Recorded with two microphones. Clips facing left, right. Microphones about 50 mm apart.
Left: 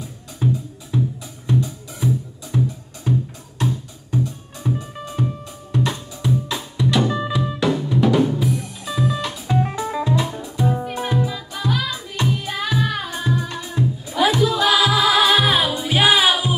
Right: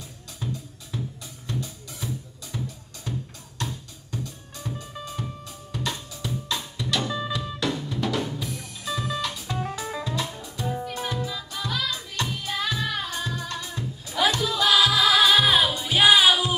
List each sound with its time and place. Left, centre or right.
0.4 s music: left
1.5 s drum: centre
2.5 s music: centre
7.6 s drum kit: centre
9.5 s music: left
10.7 s music: left; by 16.4 s centre